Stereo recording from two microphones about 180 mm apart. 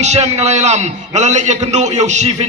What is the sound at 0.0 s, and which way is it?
A man's voice, 40° right (ahead or behind).